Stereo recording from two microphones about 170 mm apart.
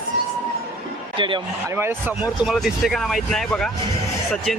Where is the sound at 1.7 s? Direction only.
10° right (ahead or behind).